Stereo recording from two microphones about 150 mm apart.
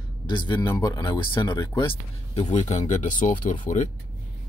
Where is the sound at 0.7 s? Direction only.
20° left (ahead or behind).